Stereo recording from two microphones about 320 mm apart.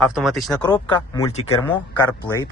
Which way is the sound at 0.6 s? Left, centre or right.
Centre.